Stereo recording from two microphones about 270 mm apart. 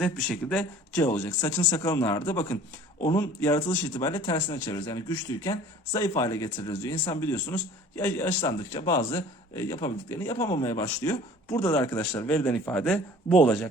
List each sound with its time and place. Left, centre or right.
0.0 s speech: centre